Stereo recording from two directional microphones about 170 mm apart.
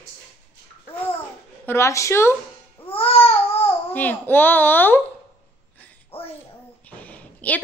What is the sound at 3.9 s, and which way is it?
A woman's voice, 10° left (ahead or behind).